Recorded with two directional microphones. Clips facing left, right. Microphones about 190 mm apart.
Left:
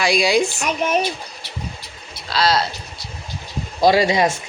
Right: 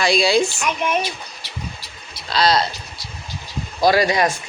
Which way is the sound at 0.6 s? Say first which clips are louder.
Left 2 dB; 40° left (ahead or behind).